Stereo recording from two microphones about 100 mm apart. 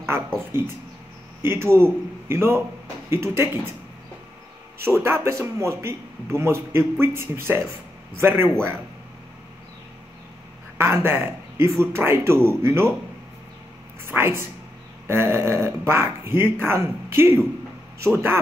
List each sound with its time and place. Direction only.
1.4 s a man's voice: 25° right (ahead or behind)
5.0 s a man's voice: 25° right (ahead or behind)
10.8 s a man's voice: 25° right (ahead or behind)
14.0 s a man's voice: 25° right (ahead or behind)